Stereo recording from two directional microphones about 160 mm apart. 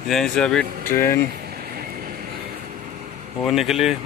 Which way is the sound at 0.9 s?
15° left (ahead or behind).